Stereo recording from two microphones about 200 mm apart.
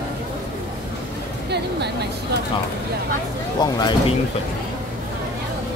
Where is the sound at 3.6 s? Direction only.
20° left (ahead or behind).